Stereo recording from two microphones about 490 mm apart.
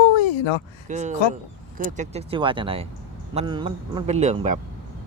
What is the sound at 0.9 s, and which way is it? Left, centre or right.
Speech, centre.